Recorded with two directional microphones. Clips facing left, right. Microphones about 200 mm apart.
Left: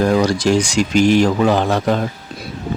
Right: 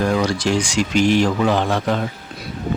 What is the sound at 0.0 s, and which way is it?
Speech, 40° left (ahead or behind).